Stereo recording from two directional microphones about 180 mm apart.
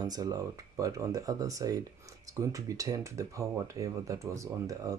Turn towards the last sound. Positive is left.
turn(degrees=-20)  # may be behind; listen again after turning